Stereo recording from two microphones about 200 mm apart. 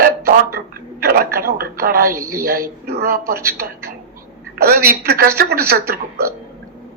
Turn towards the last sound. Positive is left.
turn(degrees=-50)  # may be behind; listen again after turning